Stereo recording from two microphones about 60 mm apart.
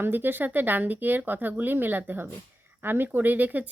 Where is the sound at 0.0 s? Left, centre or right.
Right.